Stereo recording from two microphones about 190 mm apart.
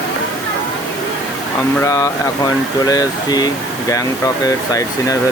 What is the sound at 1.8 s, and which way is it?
Speech, 15° left (ahead or behind).